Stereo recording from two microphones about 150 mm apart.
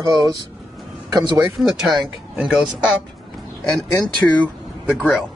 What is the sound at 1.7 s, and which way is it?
Speech, 5° right (ahead or behind).